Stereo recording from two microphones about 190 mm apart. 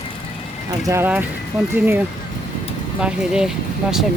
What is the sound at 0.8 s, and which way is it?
Speech, 15° right (ahead or behind).